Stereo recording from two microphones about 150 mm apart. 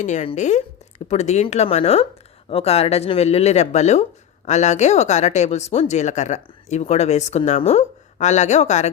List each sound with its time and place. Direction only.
0.0 s speech: 50° left (ahead or behind)